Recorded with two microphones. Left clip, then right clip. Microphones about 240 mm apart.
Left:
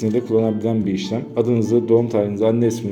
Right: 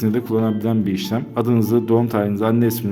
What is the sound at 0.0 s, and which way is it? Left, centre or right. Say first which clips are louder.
A man's voice: left 2 dB; right.